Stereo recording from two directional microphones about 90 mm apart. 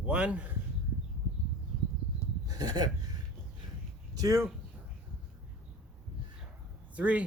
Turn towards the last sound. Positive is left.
turn(degrees=-15)  # may be behind; listen again after turning